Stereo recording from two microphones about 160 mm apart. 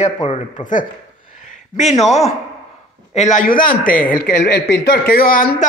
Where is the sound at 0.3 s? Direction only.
50° left (ahead or behind).